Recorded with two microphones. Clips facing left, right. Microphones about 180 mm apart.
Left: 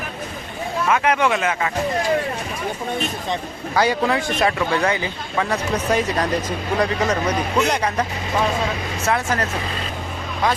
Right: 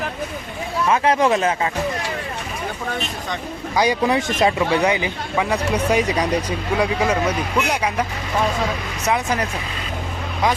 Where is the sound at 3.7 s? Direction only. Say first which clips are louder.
Right 1 dB; 15° right (ahead or behind).